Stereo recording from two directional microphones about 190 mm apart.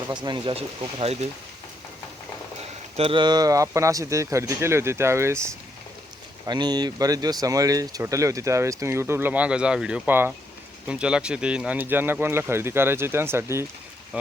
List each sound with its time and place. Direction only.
0.1 s speech: 25° right (ahead or behind)
2.6 s speech: 35° right (ahead or behind); by 13.7 s 15° right (ahead or behind)